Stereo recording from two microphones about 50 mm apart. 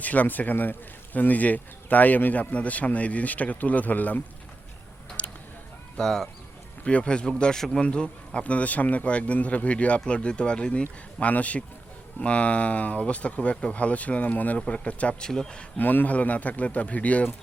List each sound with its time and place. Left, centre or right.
0.0 s speech: left
5.2 s a sound: left
6.0 s speech: centre
11.2 s speech: left
15.2 s speech: centre
15.8 s speech: left